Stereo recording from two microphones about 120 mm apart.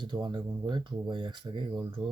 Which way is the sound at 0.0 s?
40° right (ahead or behind).